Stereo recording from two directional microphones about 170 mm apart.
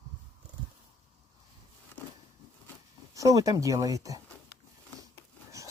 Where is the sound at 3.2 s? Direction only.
20° right (ahead or behind).